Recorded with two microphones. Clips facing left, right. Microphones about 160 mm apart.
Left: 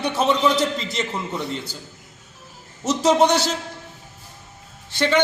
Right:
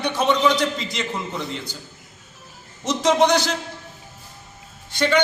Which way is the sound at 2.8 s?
10° left (ahead or behind).